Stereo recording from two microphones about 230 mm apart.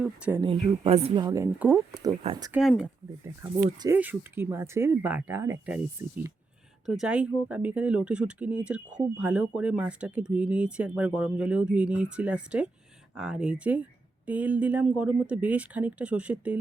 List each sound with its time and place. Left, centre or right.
0.0 s speech: centre
0.4 s speech: right
2.5 s speech: centre